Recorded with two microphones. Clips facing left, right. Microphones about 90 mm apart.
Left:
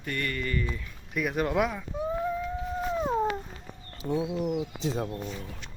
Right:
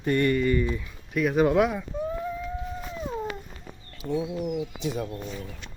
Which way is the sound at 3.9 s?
35° left (ahead or behind).